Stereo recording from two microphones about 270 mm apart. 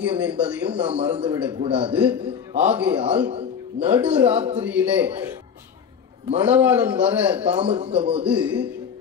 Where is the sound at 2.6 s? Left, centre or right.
Centre.